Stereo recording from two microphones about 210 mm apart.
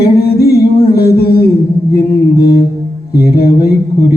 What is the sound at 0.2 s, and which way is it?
Singing, 45° left (ahead or behind).